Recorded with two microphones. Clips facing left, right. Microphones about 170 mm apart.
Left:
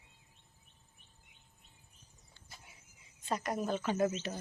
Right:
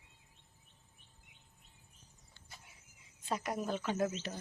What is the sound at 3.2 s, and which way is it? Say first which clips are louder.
A woman's voice: left 2 dB; 5° right (ahead or behind).